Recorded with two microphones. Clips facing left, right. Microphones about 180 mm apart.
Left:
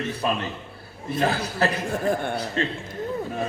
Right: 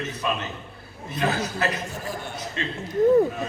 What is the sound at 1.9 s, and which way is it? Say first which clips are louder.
Speech: left 9 dB; 55° left (ahead or behind).